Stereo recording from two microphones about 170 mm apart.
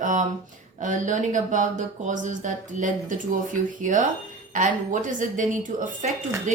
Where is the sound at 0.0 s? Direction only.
50° right (ahead or behind).